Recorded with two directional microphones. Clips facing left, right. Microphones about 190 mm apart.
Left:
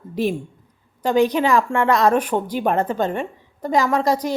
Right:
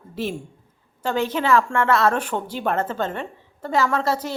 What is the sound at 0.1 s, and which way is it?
A man's voice, 15° left (ahead or behind).